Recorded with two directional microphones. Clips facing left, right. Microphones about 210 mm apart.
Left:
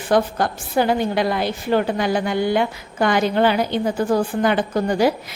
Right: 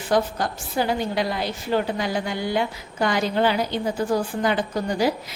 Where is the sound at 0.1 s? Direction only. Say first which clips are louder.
Left 4 dB; 60° left (ahead or behind).